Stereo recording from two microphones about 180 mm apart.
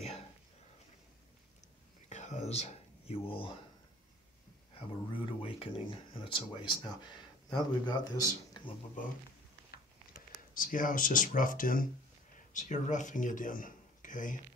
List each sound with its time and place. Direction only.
2.0 s whispering: 40° left (ahead or behind)
4.7 s speech: 30° left (ahead or behind)
10.5 s speech: 50° left (ahead or behind)